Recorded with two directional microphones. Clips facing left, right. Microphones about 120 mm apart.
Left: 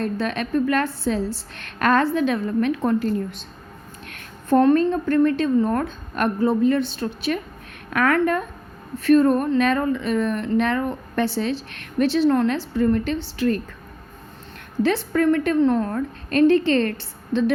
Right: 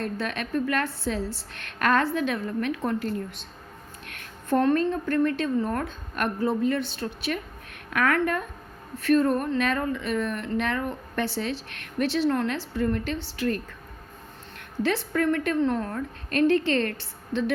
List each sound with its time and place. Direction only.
0.0 s a woman's voice: 30° left (ahead or behind)
14.8 s a woman's voice: 30° left (ahead or behind)